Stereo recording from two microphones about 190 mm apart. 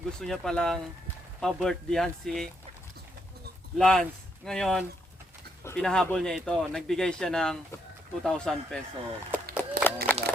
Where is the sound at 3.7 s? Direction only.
5° left (ahead or behind).